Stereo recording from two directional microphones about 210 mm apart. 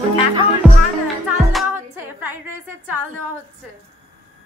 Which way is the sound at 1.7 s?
10° right (ahead or behind).